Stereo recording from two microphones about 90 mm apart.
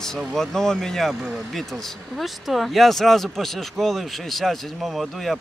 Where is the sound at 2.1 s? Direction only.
Centre (ahead or behind).